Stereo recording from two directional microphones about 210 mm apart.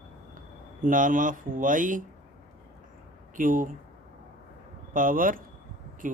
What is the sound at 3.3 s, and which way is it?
Speech, 40° right (ahead or behind).